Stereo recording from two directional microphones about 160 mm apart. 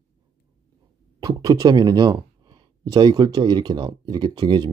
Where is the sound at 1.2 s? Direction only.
20° right (ahead or behind).